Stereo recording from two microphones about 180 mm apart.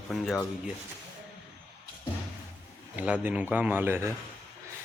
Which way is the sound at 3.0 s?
10° right (ahead or behind).